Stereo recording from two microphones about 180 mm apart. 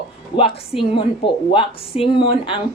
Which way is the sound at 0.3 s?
30° left (ahead or behind).